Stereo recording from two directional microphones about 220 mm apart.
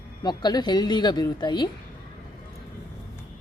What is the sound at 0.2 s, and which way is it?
Speech, 20° left (ahead or behind).